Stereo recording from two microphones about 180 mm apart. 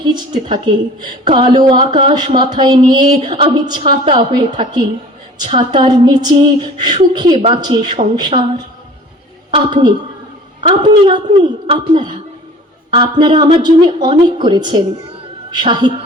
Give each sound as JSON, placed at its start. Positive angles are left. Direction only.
{"t": 0.0, "sound": "speech", "side_deg": -25}
{"t": 9.5, "sound": "speech", "side_deg": -25}